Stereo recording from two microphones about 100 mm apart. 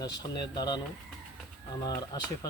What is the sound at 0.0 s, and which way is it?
Speech, 45° left (ahead or behind).